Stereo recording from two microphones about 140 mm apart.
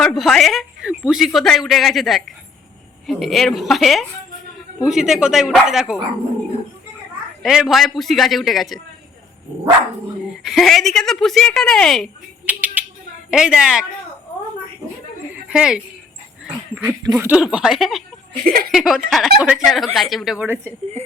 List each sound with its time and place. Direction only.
0.0 s speech: centre (ahead or behind)
7.4 s speech: centre (ahead or behind)
10.4 s speech: centre (ahead or behind)
12.5 s a sound: 10° right (ahead or behind)
13.3 s speech: 5° right (ahead or behind)
15.4 s speech: 5° right (ahead or behind)
17.4 s speech: 5° right (ahead or behind)
18.4 s speech: 90° right
18.7 s speech: centre (ahead or behind)